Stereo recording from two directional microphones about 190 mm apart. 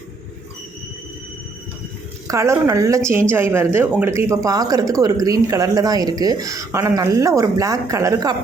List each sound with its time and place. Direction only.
2.2 s speech: 15° right (ahead or behind)